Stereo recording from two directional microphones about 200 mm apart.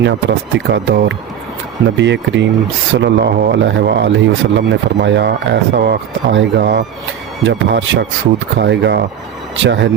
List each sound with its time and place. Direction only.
0.0 s a man's voice: 65° right (ahead or behind)